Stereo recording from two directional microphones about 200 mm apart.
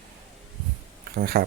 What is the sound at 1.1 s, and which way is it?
Speech, 50° right (ahead or behind).